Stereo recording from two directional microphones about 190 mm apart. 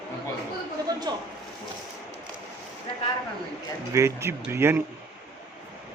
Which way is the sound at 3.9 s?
15° right (ahead or behind).